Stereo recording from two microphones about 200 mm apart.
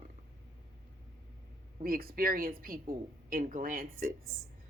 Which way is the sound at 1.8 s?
45° right (ahead or behind).